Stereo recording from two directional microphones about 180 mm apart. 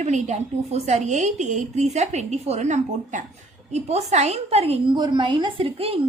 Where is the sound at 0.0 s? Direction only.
40° right (ahead or behind).